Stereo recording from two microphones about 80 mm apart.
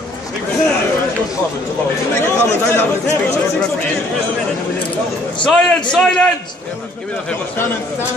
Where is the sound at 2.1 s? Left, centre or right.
Left.